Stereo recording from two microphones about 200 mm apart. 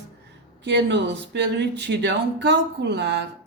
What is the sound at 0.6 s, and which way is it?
Speech, 60° right (ahead or behind).